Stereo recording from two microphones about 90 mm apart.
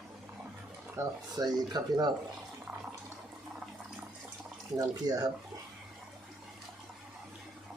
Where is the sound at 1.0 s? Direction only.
30° right (ahead or behind).